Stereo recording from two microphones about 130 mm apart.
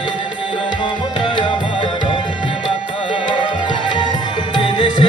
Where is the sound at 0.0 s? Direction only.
35° left (ahead or behind).